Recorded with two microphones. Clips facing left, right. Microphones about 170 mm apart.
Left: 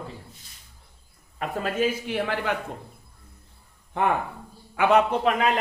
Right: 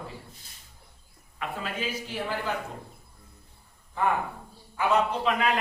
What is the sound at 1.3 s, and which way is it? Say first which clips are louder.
Speech: left 7 dB; 40° left (ahead or behind).